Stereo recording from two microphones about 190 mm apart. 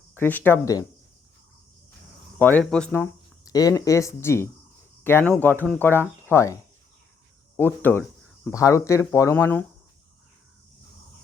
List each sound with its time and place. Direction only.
0.2 s speech: 10° left (ahead or behind)
2.4 s speech: 10° left (ahead or behind)
3.4 s speech: 20° left (ahead or behind)